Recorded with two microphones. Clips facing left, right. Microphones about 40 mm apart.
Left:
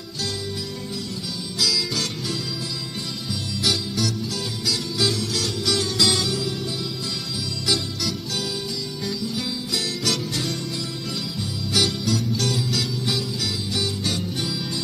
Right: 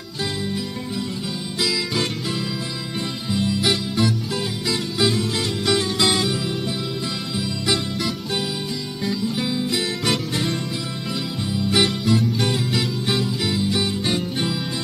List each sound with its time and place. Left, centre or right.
1.6 s music: right